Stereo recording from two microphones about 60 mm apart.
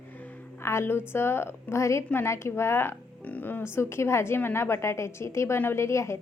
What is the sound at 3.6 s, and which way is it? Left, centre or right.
A woman's voice, left.